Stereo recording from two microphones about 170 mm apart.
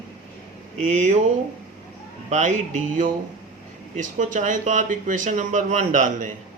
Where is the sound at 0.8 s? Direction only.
45° right (ahead or behind).